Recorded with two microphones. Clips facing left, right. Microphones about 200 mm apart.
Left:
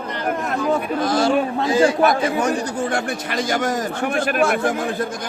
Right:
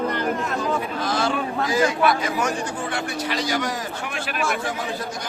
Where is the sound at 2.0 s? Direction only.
40° left (ahead or behind).